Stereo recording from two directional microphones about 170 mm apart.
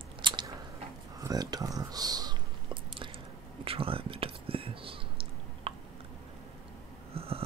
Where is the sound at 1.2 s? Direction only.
20° right (ahead or behind).